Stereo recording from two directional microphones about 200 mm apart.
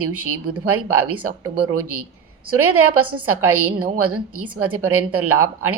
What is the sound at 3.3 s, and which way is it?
Speech, 90° right.